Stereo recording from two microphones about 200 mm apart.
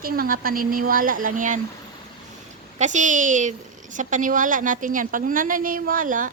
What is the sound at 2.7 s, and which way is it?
A woman's voice, 35° right (ahead or behind).